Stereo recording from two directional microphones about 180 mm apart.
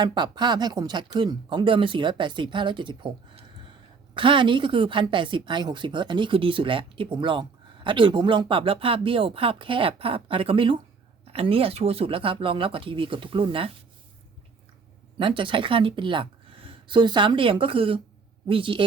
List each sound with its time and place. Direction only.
0.0 s a woman's voice: 25° right (ahead or behind)
15.2 s a woman's voice: 30° right (ahead or behind)